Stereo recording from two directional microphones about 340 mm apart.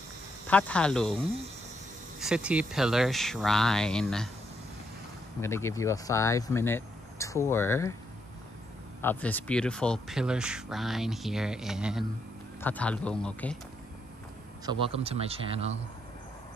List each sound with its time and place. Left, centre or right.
0.5 s speech: centre
5.4 s speech: centre
9.0 s speech: centre
14.7 s speech: centre